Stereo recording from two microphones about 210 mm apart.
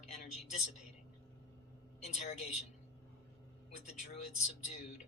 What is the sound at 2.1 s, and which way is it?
Speech, 35° left (ahead or behind).